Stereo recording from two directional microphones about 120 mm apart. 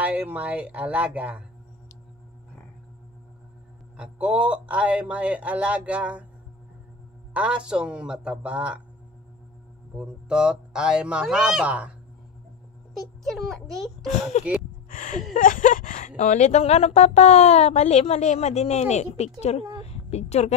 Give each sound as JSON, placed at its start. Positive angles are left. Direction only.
{"t": 0.0, "sound": "speech", "side_deg": -10}
{"t": 3.9, "sound": "speech", "side_deg": -10}
{"t": 7.3, "sound": "speech", "side_deg": -10}
{"t": 9.9, "sound": "speech", "side_deg": -10}
{"t": 13.2, "sound": "a child's voice", "side_deg": 0}
{"t": 14.3, "sound": "speech", "side_deg": 65}
{"t": 15.0, "sound": "speech", "side_deg": 90}
{"t": 15.3, "sound": "a sound", "side_deg": 90}
{"t": 16.2, "sound": "a woman's voice", "side_deg": 75}